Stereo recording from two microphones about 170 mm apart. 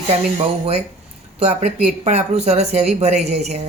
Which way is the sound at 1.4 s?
35° right (ahead or behind).